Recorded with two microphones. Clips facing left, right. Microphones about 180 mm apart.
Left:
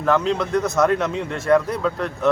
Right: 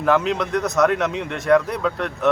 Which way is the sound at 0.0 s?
5° right (ahead or behind).